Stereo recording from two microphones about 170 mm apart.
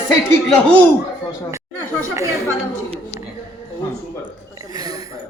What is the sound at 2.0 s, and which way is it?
Speech, 15° right (ahead or behind).